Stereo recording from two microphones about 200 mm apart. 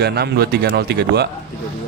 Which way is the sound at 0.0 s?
55° right (ahead or behind).